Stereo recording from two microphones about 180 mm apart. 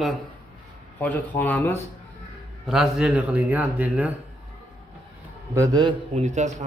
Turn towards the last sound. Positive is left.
turn(degrees=-40)  # may be behind; listen again after turning